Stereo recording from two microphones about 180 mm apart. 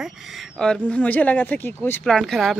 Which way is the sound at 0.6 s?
5° left (ahead or behind).